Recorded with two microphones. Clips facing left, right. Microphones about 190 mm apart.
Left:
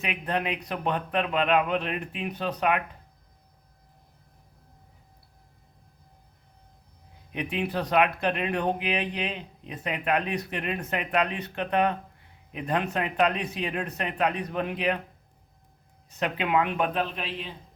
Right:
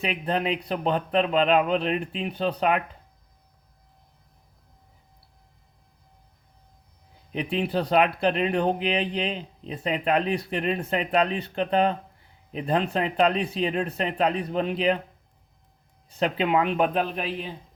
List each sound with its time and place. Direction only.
0.0 s speech: 30° right (ahead or behind)
7.5 s speech: 30° right (ahead or behind)
16.0 s speech: 30° right (ahead or behind)